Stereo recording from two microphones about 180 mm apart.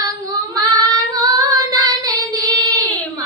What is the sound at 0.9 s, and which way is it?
Child singing, 20° right (ahead or behind).